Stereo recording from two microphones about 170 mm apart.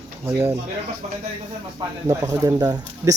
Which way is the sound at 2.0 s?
20° right (ahead or behind).